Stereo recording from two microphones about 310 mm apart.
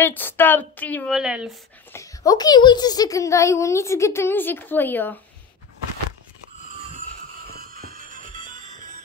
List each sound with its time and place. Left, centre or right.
0.0 s a woman's voice: centre
7.5 s music: right